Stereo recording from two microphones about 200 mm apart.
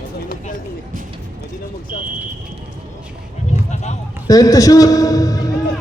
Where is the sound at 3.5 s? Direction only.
35° left (ahead or behind).